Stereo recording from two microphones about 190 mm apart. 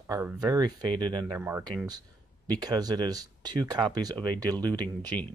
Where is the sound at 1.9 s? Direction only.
20° right (ahead or behind).